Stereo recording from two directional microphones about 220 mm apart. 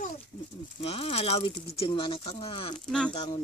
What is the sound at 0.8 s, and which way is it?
Speech, 25° left (ahead or behind).